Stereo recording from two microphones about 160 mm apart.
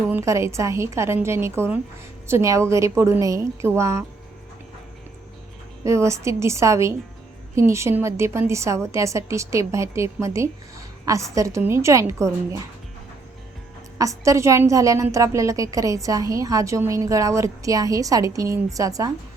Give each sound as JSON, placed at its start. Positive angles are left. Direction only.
{"t": 0.1, "sound": "a woman's voice", "side_deg": -15}
{"t": 5.8, "sound": "a woman's voice", "side_deg": -20}
{"t": 14.0, "sound": "a woman's voice", "side_deg": -20}